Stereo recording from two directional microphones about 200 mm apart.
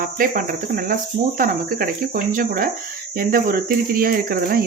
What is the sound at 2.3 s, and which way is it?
Speech, 45° right (ahead or behind).